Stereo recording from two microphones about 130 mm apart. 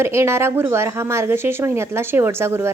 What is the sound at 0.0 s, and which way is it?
Speech, 20° right (ahead or behind).